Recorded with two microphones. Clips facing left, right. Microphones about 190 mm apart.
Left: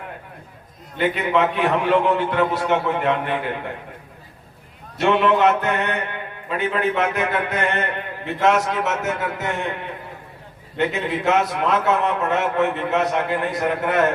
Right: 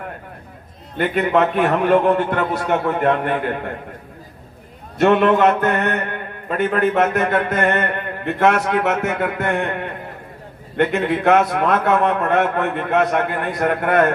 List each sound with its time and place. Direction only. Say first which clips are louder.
0.9 s a man's voice: right 3 dB; 50° right (ahead or behind)
4.9 s a man's voice: right 3 dB; 50° right (ahead or behind)